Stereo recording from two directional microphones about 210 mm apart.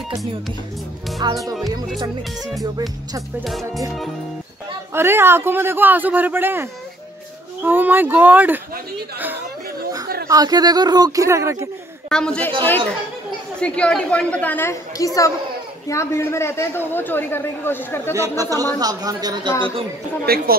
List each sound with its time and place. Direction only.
1.4 s a woman's voice: centre (ahead or behind)
4.9 s a man's voice: 10° right (ahead or behind)
10.2 s a man's voice: 15° right (ahead or behind)
12.1 s a woman's voice: 5° left (ahead or behind)
13.6 s a man's voice: 5° left (ahead or behind)
18.1 s a man's voice: 15° right (ahead or behind)
20.5 s a woman's voice: 45° right (ahead or behind)